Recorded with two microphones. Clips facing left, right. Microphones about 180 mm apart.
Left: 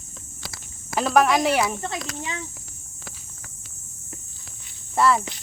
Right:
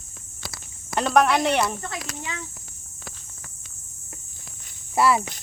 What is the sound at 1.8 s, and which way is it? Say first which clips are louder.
Speech: left 3 dB; 25° left (ahead or behind).